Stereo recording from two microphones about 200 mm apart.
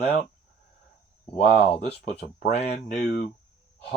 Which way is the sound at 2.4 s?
35° left (ahead or behind).